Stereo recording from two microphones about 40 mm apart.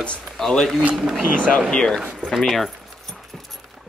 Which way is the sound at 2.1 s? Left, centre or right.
Centre.